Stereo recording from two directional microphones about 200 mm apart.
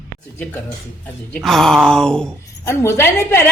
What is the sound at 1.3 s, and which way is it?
Speech, centre (ahead or behind).